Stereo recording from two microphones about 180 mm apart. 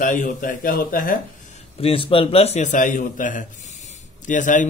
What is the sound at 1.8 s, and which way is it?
A man's voice, 30° left (ahead or behind).